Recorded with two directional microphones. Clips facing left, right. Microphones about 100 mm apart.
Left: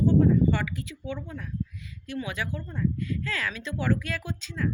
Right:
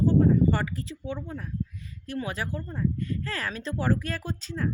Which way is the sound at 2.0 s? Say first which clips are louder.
Right 1 dB; 40° right (ahead or behind).